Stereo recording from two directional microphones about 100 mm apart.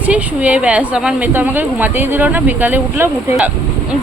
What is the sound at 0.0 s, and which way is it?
Speech, 15° right (ahead or behind).